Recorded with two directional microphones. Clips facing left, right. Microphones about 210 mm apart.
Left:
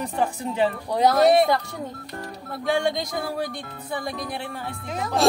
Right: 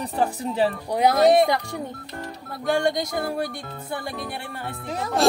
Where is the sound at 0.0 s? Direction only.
35° right (ahead or behind).